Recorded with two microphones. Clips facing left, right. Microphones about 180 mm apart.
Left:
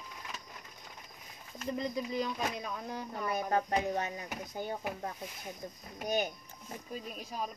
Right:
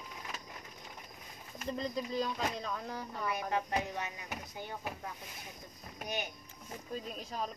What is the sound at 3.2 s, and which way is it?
A child's voice, 45° left (ahead or behind).